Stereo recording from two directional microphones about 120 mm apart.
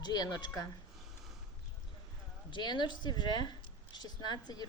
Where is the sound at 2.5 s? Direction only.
40° left (ahead or behind).